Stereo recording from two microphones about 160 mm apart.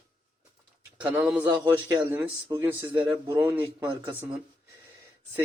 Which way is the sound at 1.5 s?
25° right (ahead or behind).